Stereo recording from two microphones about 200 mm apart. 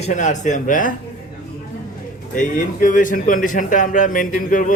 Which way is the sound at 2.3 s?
40° left (ahead or behind).